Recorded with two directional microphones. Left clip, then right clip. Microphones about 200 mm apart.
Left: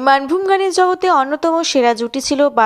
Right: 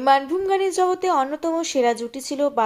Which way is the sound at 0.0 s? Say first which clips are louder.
Left 5 dB; 20° left (ahead or behind).